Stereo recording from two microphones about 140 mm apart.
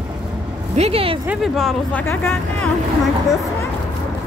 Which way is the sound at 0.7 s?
45° right (ahead or behind).